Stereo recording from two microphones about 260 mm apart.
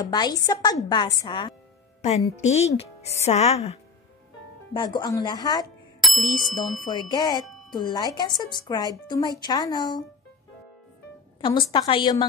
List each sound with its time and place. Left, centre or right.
0.0 s speech: centre
2.0 s music: left
2.3 s a woman's voice: left
6.0 s bicycle bell: centre
6.8 s speech: centre
11.4 s a woman's voice: centre